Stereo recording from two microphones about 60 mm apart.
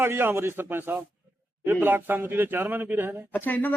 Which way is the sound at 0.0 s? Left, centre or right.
Right.